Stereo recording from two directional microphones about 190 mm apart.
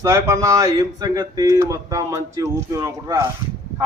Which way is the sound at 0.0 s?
15° right (ahead or behind).